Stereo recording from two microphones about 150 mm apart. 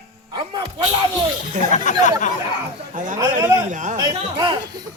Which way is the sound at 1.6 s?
60° right (ahead or behind).